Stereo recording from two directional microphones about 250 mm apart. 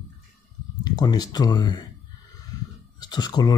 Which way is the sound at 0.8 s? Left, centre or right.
Centre.